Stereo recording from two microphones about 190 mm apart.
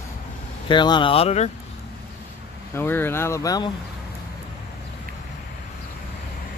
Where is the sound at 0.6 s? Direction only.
25° left (ahead or behind).